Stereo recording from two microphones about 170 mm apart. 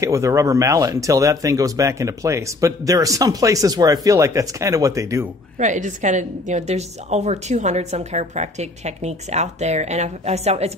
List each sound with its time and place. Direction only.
0.0 s speech: 20° right (ahead or behind)
5.6 s a woman's voice: 45° right (ahead or behind)